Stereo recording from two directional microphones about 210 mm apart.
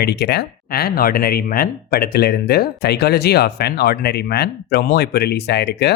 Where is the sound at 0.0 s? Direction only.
50° left (ahead or behind).